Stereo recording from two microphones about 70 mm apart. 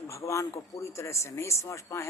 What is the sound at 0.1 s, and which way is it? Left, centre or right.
A man's voice, left.